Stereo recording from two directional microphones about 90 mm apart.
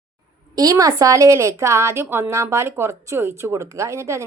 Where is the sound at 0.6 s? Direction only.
40° right (ahead or behind).